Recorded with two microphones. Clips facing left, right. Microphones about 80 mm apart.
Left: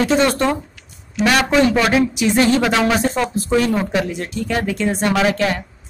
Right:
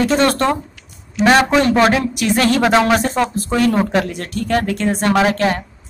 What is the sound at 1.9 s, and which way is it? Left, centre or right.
A woman's voice, right.